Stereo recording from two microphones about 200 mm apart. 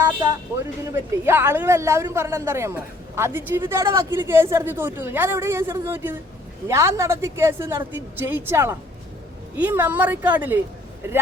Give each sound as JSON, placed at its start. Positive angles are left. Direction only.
{"t": 0.0, "sound": "speech", "side_deg": -20}